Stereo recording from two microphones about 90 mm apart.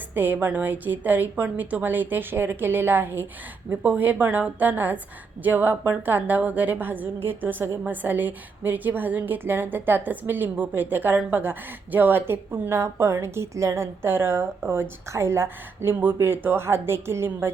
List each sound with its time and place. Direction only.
0.1 s a woman's voice: 20° right (ahead or behind)